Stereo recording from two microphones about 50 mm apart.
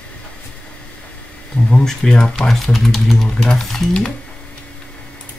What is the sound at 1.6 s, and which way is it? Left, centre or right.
Speech, centre.